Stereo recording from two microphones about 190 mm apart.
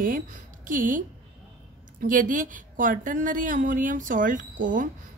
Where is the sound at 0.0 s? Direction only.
45° right (ahead or behind).